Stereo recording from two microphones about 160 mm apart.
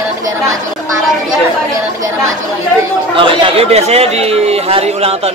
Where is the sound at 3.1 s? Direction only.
30° right (ahead or behind).